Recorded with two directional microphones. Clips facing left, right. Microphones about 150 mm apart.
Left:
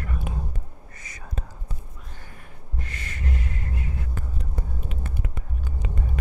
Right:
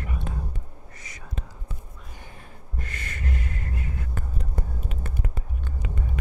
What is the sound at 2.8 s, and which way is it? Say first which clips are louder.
Gasp: even; 50° right (ahead or behind).